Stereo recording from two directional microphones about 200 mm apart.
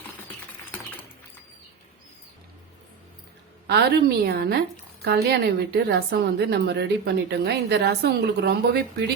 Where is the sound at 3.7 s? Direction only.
55° right (ahead or behind).